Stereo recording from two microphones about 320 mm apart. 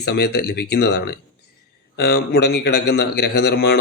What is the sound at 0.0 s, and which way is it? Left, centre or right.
Speech, left.